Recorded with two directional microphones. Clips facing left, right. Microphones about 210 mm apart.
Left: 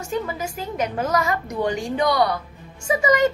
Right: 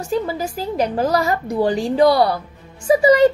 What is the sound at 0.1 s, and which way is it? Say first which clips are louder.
A woman's voice: right 5 dB; 35° right (ahead or behind).